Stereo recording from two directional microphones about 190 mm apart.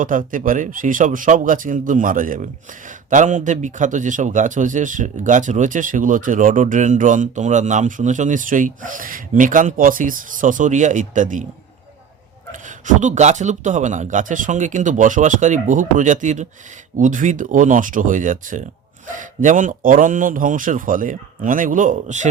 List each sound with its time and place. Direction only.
0.0 s a man's voice: 45° right (ahead or behind)
12.5 s a man's voice: 40° right (ahead or behind)